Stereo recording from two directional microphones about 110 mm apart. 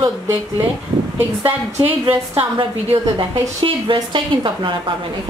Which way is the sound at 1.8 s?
20° right (ahead or behind).